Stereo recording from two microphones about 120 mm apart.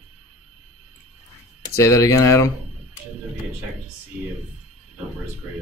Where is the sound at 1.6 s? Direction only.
25° left (ahead or behind).